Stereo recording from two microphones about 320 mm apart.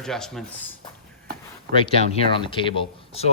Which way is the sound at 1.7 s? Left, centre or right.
Centre.